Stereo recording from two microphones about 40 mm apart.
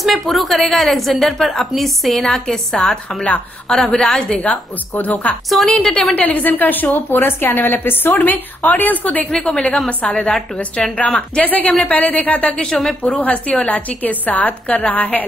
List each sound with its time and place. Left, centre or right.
0.0 s a woman's voice: centre
4.9 s a woman's voice: left
5.7 s a woman's voice: centre
6.1 s a woman's voice: left
9.2 s a woman's voice: left
11.0 s a woman's voice: left
12.6 s a woman's voice: centre
13.2 s a woman's voice: left